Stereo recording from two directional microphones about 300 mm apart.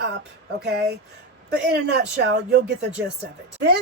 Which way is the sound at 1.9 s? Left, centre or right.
Right.